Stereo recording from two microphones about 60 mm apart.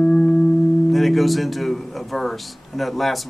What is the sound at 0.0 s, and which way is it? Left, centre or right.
Music, centre.